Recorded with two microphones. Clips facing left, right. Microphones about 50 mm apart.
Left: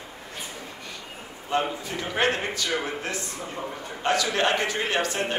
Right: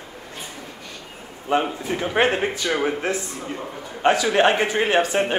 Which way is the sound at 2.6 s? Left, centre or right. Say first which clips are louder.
Right 8 dB; right.